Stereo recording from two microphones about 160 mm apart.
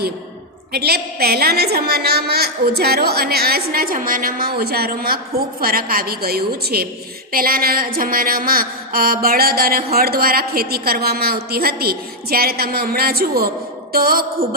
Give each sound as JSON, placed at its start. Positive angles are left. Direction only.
{"t": 0.7, "sound": "mantra", "side_deg": -75}